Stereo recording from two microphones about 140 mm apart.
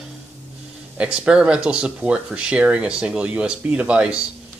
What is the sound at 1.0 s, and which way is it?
Speech, 5° right (ahead or behind).